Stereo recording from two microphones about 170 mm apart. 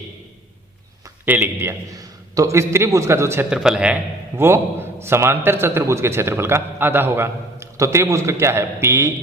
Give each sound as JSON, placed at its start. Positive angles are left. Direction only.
{"t": 1.2, "sound": "a man's voice", "side_deg": -10}
{"t": 3.5, "sound": "a man's voice", "side_deg": -5}